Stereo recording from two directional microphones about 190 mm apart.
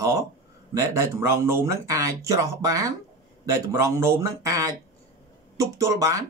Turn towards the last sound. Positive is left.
turn(degrees=-15)  # may be behind; listen again after turning